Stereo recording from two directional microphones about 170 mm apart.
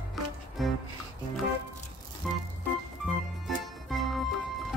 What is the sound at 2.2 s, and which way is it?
Organ, 5° left (ahead or behind).